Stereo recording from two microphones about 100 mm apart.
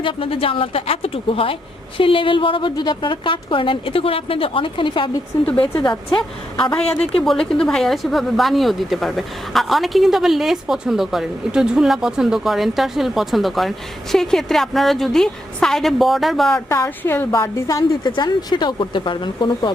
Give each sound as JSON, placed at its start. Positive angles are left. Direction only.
{"t": 0.0, "sound": "a woman's voice", "side_deg": 60}
{"t": 6.7, "sound": "a woman's voice", "side_deg": 10}
{"t": 16.6, "sound": "a woman's voice", "side_deg": 25}
{"t": 18.0, "sound": "speech", "side_deg": 45}